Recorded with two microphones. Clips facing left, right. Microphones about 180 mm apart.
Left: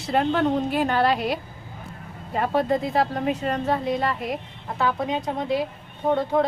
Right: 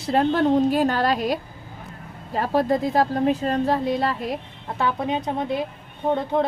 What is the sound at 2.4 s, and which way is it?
Speech, 40° right (ahead or behind).